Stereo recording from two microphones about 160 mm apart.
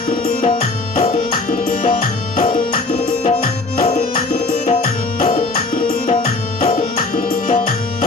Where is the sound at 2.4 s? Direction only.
35° left (ahead or behind).